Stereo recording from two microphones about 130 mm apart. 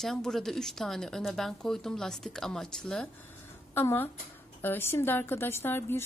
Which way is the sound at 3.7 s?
15° left (ahead or behind).